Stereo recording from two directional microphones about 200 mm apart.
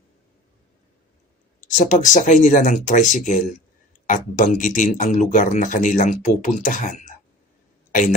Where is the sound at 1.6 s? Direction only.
40° left (ahead or behind).